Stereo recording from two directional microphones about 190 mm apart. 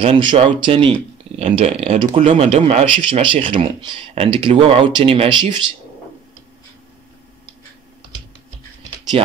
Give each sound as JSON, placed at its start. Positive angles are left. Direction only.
{"t": 0.0, "sound": "speech", "side_deg": -25}
{"t": 9.1, "sound": "speech", "side_deg": -30}